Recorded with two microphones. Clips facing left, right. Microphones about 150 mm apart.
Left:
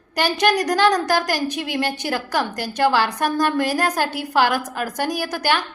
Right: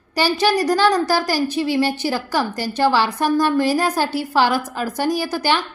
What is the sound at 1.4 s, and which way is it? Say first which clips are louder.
Speech: right 5 dB; 15° left (ahead or behind).